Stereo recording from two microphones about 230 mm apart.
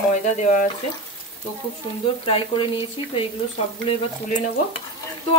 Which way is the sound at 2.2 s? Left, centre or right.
Left.